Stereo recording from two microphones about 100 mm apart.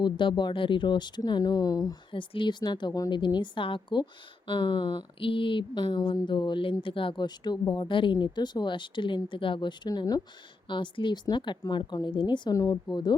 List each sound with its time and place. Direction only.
0.0 s a woman's voice: 50° left (ahead or behind)
2.1 s a woman's voice: 55° left (ahead or behind)
12.5 s a woman's voice: 35° left (ahead or behind)